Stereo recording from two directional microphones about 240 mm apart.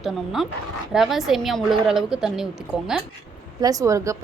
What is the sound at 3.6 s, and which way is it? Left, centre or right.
Speech, centre.